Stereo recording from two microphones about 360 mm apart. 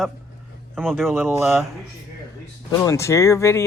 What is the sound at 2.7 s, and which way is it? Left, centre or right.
Speech, centre.